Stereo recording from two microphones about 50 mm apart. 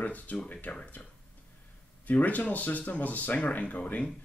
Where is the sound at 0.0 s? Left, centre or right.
Left.